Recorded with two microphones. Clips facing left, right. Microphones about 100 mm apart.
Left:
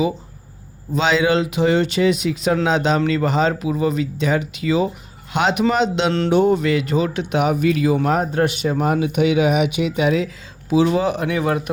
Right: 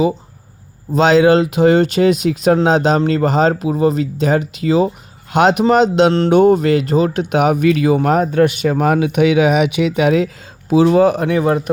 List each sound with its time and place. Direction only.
0.9 s speech: 45° right (ahead or behind); by 7.9 s 70° right (ahead or behind)
7.9 s speech: 55° right (ahead or behind); by 11.7 s 35° right (ahead or behind)